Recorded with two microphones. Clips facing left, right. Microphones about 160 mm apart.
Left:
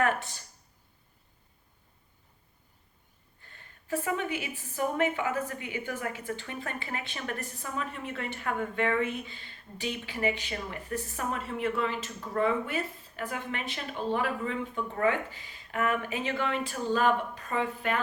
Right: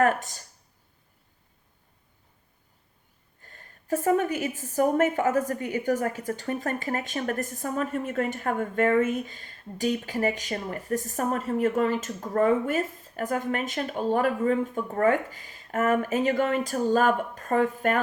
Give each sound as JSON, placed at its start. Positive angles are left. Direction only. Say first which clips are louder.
{"t": 0.0, "sound": "speech", "louder": "right 5 dB", "side_deg": -40}
{"t": 3.4, "sound": "a woman's voice", "louder": "right 4 dB", "side_deg": -40}